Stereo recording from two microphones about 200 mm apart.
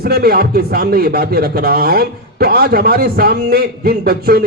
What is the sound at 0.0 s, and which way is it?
A man's voice, 50° right (ahead or behind).